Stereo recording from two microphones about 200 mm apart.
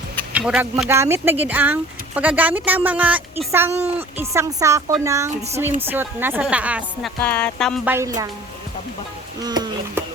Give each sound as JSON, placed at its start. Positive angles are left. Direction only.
{"t": 0.3, "sound": "speech", "side_deg": -5}
{"t": 7.2, "sound": "speech", "side_deg": 5}
{"t": 7.9, "sound": "speech", "side_deg": -15}
{"t": 9.4, "sound": "insect", "side_deg": -20}